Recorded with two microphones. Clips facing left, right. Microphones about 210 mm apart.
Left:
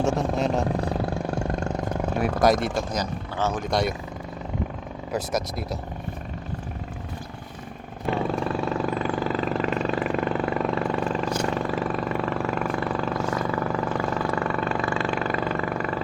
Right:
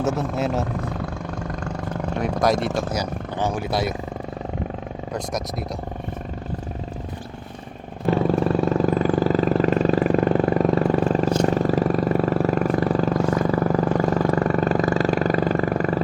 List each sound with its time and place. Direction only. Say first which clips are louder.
0.0 s speech: even; 5° right (ahead or behind)
0.9 s roar: left 3 dB; 30° left (ahead or behind)
2.1 s speech: even; 5° left (ahead or behind)
2.9 s speech: right 2 dB; 10° right (ahead or behind)
5.1 s speech: left 2 dB; centre (ahead or behind)
8.1 s vehicle: right 6 dB; 40° right (ahead or behind)